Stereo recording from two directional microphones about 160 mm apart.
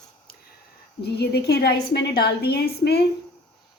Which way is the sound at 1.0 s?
90° left.